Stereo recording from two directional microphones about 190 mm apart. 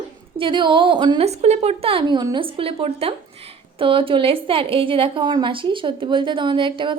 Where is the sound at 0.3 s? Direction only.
25° right (ahead or behind).